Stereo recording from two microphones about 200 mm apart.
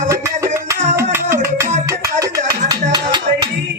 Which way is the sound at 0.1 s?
15° right (ahead or behind).